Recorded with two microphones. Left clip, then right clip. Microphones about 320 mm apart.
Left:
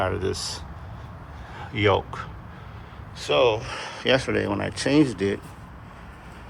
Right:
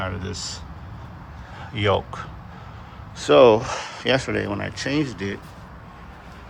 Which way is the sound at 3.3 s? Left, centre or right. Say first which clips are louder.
Right 7 dB; right.